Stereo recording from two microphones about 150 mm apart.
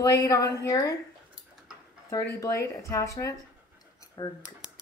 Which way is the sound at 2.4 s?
20° left (ahead or behind).